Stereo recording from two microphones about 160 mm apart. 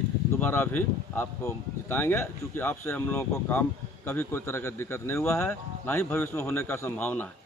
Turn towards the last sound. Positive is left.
turn(degrees=10)  # may be behind; listen again after turning